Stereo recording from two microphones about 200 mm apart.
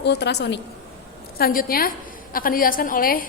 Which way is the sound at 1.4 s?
45° left (ahead or behind).